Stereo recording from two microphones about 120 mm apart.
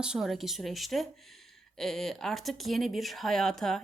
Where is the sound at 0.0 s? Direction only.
5° right (ahead or behind).